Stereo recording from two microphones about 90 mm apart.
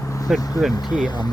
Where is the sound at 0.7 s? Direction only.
50° left (ahead or behind).